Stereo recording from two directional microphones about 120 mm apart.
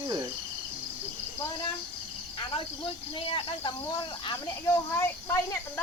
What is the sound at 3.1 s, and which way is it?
Speech, 45° left (ahead or behind).